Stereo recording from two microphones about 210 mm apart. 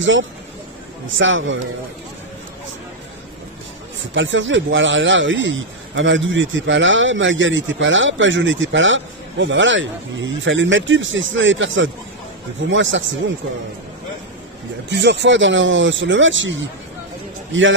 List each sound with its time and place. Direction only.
1.1 s speech: 65° right (ahead or behind)
4.1 s speech: 60° right (ahead or behind)
14.9 s a man's voice: 55° right (ahead or behind)